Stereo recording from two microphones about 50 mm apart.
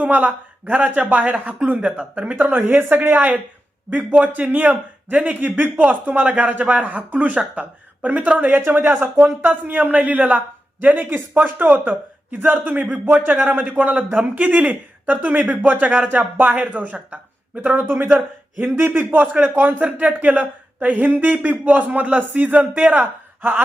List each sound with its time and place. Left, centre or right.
0.0 s speech: right
1.8 s speech: right
2.3 s speech: right
10.8 s speech: right